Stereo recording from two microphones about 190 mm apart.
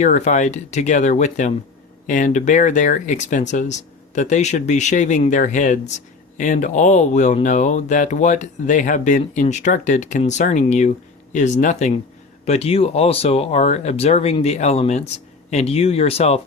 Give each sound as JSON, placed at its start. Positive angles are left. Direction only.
{"t": 0.0, "sound": "speech", "side_deg": 40}